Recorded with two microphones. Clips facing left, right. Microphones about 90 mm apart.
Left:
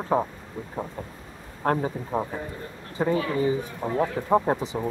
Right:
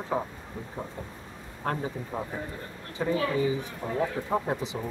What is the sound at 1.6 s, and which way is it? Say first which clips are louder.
Speech: left 6 dB; 40° left (ahead or behind).